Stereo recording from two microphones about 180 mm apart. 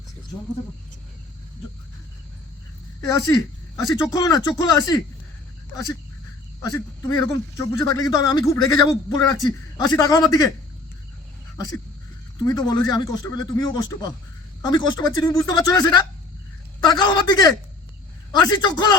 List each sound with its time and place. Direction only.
3.1 s a man's voice: 20° left (ahead or behind)
6.6 s a man's voice: 20° left (ahead or behind)
12.4 s a man's voice: 20° left (ahead or behind)